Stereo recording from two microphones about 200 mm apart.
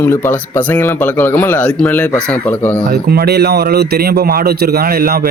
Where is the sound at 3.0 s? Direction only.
50° right (ahead or behind).